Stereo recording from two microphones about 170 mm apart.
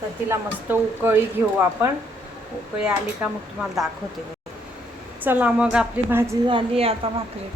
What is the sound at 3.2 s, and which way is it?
Speech, 10° right (ahead or behind).